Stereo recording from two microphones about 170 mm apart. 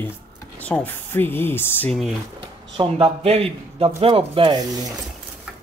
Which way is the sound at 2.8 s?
35° right (ahead or behind).